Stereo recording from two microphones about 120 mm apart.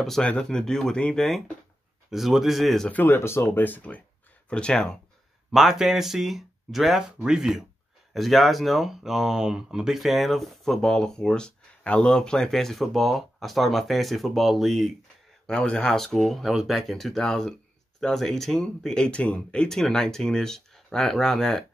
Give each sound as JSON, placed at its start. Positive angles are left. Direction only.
{"t": 0.0, "sound": "speech", "side_deg": 5}
{"t": 3.0, "sound": "speech", "side_deg": 20}